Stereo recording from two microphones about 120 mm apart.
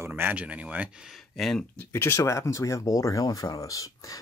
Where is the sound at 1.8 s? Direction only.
20° left (ahead or behind).